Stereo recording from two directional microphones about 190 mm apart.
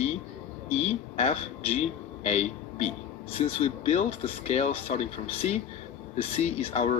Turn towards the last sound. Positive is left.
turn(degrees=35)  # may be behind; listen again after turning